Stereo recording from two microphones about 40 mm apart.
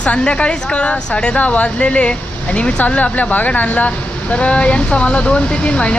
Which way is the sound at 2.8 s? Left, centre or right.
Left.